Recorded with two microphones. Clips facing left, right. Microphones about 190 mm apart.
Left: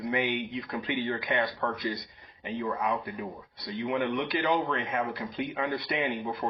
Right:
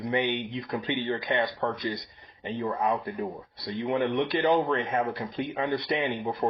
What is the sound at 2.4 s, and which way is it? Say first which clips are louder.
Speech: right 2 dB; 35° right (ahead or behind).